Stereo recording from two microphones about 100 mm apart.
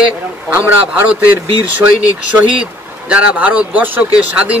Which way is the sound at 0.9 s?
20° right (ahead or behind).